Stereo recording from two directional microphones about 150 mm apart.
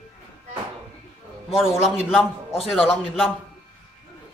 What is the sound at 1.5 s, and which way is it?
Speech, 5° right (ahead or behind).